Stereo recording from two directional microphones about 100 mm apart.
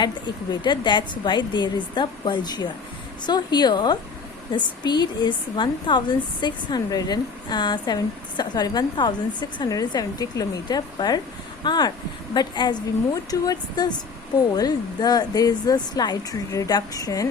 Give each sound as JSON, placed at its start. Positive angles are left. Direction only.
{"t": 0.0, "sound": "speech", "side_deg": 50}